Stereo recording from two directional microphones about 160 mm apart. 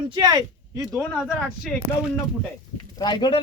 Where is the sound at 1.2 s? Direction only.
5° right (ahead or behind).